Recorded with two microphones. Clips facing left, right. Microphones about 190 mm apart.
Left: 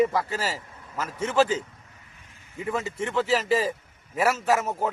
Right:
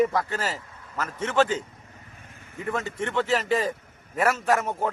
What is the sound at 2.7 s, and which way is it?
A man's voice, 5° left (ahead or behind).